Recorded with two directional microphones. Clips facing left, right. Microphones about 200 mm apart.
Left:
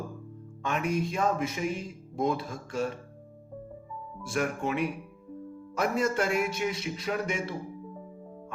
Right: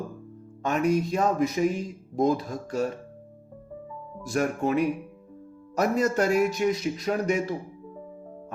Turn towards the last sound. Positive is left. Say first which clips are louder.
# right 6 dB
turn(degrees=-40)  # may be behind; listen again after turning